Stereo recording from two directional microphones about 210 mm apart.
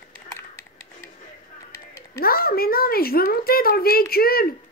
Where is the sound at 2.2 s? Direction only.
45° left (ahead or behind).